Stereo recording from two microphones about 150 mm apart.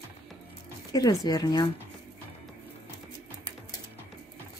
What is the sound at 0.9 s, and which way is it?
Speech, 25° left (ahead or behind).